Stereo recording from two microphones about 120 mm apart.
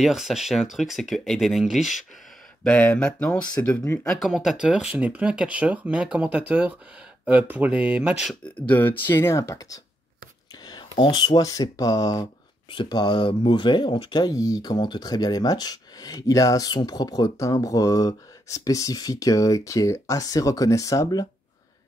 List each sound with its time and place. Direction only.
0.0 s speech: centre (ahead or behind)
2.6 s speech: 10° left (ahead or behind)
4.3 s speech: 5° right (ahead or behind)
8.5 s speech: 10° left (ahead or behind)
10.6 s speech: 40° left (ahead or behind)